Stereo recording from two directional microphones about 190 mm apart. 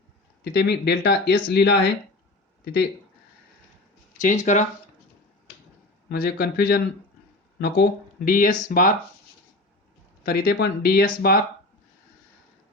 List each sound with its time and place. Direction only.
0.4 s speech: 60° left (ahead or behind)
4.2 s speech: 40° left (ahead or behind)
6.1 s speech: 50° left (ahead or behind)
10.2 s speech: 55° left (ahead or behind)